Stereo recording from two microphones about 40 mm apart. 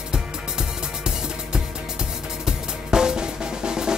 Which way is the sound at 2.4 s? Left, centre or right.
Centre.